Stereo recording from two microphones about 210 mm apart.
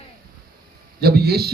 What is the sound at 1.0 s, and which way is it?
Speech, 50° right (ahead or behind).